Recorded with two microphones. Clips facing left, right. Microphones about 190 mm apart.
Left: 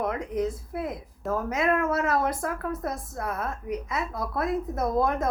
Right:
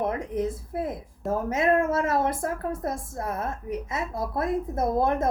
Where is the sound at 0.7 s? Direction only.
30° right (ahead or behind).